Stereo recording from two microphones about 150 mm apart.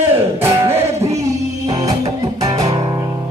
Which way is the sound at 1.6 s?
25° right (ahead or behind).